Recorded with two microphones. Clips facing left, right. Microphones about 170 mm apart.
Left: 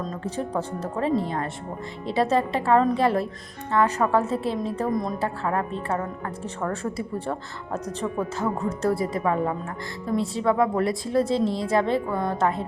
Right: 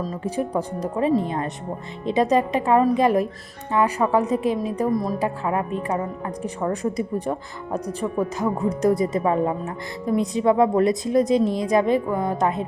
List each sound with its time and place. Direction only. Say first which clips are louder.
0.0 s a woman's voice: right 4 dB; 10° right (ahead or behind)
4.9 s a woman's voice: right 3 dB; 5° right (ahead or behind)
5.2 s a woman's voice: right 2 dB; 15° right (ahead or behind)